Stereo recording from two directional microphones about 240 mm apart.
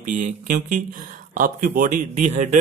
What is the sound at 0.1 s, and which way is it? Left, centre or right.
A man's voice, right.